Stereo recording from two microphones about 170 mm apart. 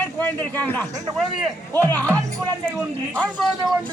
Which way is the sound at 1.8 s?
10° left (ahead or behind).